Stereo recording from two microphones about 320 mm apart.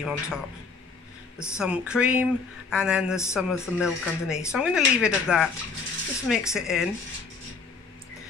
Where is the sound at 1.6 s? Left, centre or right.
Centre.